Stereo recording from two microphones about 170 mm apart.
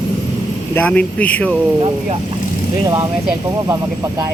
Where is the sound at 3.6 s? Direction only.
20° right (ahead or behind).